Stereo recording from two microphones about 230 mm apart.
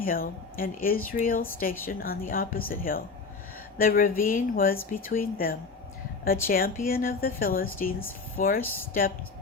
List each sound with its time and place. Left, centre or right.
0.0 s a woman's voice: left
8.6 s speech: centre